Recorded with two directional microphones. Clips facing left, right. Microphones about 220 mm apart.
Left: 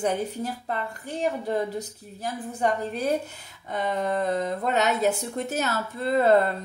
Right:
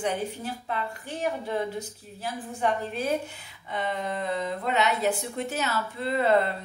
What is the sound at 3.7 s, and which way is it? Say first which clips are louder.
Speech: left 4 dB; 45° left (ahead or behind).